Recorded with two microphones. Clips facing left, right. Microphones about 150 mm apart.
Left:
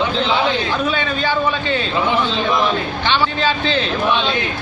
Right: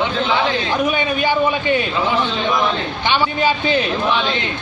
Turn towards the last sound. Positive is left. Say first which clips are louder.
# right 1 dB
turn(degrees=-15)  # may be behind; listen again after turning